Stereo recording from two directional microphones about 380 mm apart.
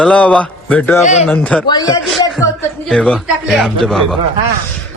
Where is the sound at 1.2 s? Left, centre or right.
Centre.